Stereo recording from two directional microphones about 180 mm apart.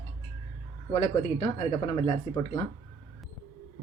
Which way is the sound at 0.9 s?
35° left (ahead or behind).